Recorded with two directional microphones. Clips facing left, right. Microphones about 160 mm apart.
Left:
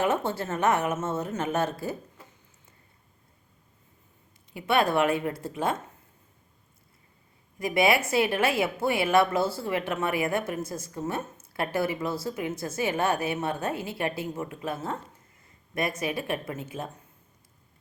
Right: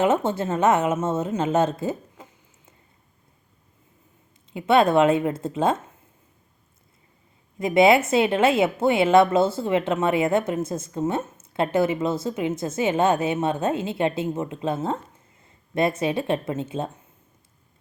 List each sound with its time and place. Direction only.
0.0 s a woman's voice: 20° right (ahead or behind)
4.5 s a woman's voice: 20° right (ahead or behind)
7.6 s a woman's voice: 25° right (ahead or behind)